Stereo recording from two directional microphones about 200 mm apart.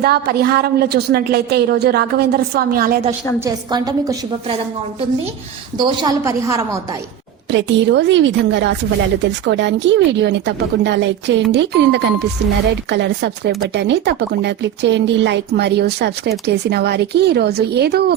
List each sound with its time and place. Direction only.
0.0 s a woman's voice: 50° right (ahead or behind)
3.4 s a woman's voice: 20° right (ahead or behind)
5.7 s a woman's voice: 20° right (ahead or behind)
7.5 s speech: 60° right (ahead or behind)